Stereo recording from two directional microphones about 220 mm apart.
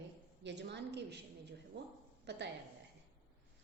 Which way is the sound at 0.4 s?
50° right (ahead or behind).